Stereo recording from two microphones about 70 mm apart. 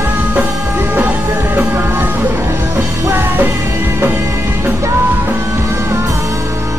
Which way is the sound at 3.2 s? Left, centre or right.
Right.